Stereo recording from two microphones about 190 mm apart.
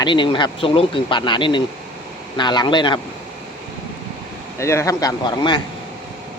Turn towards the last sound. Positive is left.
turn(degrees=25)  # may be behind; listen again after turning